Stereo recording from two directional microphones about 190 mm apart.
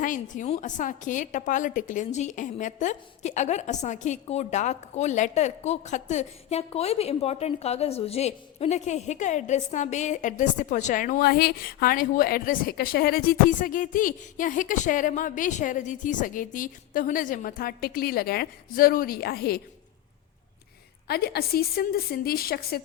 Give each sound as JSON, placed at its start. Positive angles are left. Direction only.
{"t": 0.0, "sound": "a woman's voice", "side_deg": 40}
{"t": 21.1, "sound": "a woman's voice", "side_deg": 55}